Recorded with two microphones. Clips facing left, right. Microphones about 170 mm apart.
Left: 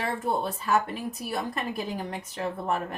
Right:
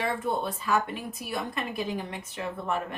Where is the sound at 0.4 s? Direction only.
40° left (ahead or behind).